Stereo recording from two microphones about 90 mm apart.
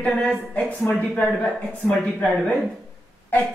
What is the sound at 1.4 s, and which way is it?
Speech, 10° left (ahead or behind).